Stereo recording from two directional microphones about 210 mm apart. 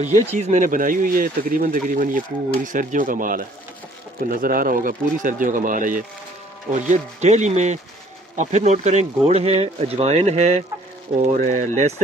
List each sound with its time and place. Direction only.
0.1 s speech: 35° right (ahead or behind)